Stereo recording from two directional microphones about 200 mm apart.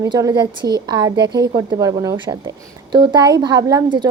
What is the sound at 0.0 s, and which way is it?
A woman's voice, 15° right (ahead or behind).